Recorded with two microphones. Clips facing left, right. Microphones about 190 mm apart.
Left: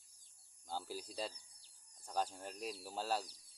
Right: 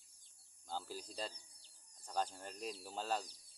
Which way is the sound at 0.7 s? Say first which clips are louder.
Left 1 dB; 10° left (ahead or behind).